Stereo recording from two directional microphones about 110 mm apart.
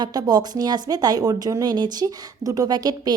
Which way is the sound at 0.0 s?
35° right (ahead or behind).